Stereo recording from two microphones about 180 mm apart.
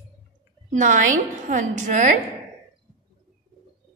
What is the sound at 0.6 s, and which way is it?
A woman's voice, 45° right (ahead or behind).